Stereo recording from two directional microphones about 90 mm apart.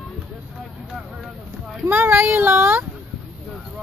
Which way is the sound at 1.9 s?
25° right (ahead or behind).